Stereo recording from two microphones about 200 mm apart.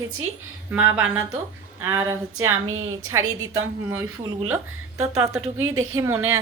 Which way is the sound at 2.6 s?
90° right.